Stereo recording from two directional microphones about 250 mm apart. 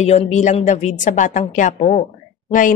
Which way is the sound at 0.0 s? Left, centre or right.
Left.